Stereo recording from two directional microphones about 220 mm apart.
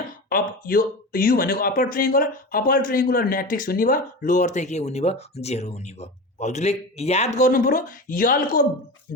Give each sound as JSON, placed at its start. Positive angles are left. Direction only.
{"t": 0.3, "sound": "speech", "side_deg": 40}